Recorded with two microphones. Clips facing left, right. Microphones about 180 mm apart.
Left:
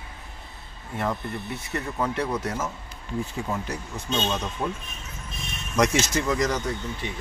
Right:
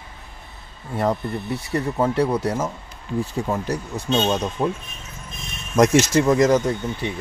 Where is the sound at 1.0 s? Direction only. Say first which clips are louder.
Right 6 dB; 35° right (ahead or behind).